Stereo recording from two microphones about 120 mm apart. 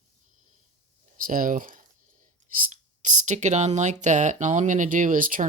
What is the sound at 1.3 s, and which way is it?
Speech, 90° right.